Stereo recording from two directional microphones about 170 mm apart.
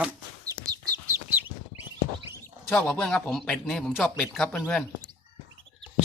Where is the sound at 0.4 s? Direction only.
20° right (ahead or behind).